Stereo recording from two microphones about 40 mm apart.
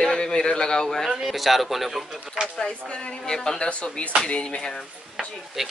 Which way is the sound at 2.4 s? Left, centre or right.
Centre.